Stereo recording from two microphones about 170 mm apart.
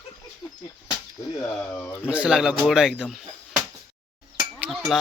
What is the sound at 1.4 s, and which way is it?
Speech, 5° left (ahead or behind).